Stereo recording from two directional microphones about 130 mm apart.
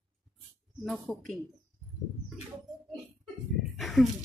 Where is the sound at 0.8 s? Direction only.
5° left (ahead or behind).